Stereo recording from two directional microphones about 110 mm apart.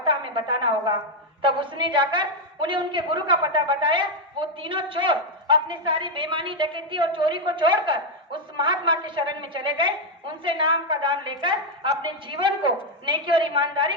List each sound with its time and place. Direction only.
0.0 s a woman's voice: 50° right (ahead or behind)